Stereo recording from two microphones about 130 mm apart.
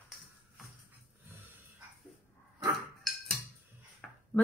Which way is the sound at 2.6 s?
Centre (ahead or behind).